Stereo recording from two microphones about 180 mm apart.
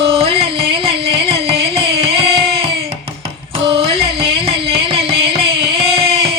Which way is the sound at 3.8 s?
30° right (ahead or behind).